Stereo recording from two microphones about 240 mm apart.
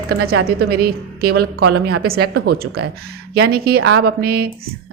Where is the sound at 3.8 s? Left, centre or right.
Right.